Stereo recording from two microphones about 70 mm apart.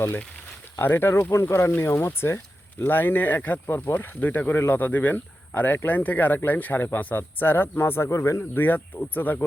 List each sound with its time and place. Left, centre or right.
0.8 s speech: left
8.4 s speech: left